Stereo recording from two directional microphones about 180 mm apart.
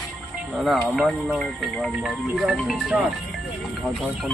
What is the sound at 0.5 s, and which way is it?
Speech, centre (ahead or behind).